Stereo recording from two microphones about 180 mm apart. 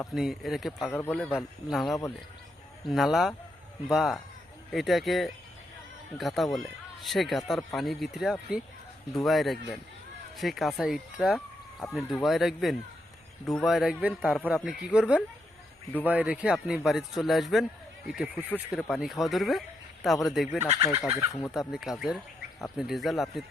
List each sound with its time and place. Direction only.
0.1 s speech: centre (ahead or behind)
0.9 s speech: 10° left (ahead or behind)
20.7 s speech: 15° right (ahead or behind)
21.5 s speech: centre (ahead or behind)